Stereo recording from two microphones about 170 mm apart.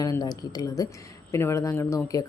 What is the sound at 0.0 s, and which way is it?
A woman's voice, 20° left (ahead or behind).